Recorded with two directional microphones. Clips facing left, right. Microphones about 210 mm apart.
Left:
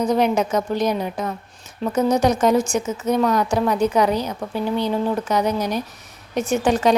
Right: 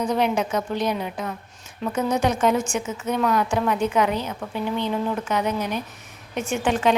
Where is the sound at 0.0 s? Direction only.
40° left (ahead or behind).